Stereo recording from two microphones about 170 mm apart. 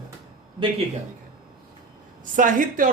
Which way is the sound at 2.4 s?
50° right (ahead or behind).